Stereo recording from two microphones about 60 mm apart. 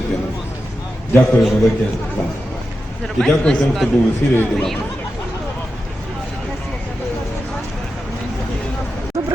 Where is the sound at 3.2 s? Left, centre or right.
Centre.